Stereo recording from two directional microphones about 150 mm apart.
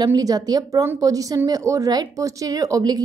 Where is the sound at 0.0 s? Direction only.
25° right (ahead or behind).